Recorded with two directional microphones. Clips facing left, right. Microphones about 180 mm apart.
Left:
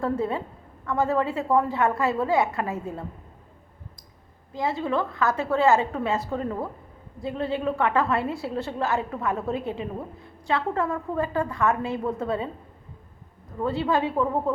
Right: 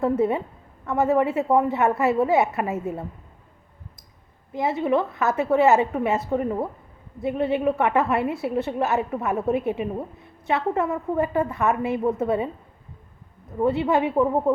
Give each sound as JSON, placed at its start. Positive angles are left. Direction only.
{"t": 0.0, "sound": "a woman's voice", "side_deg": -20}
{"t": 4.5, "sound": "a woman's voice", "side_deg": -20}
{"t": 13.6, "sound": "a woman's voice", "side_deg": -20}